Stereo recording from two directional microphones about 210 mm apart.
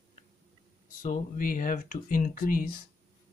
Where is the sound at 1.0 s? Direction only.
40° left (ahead or behind).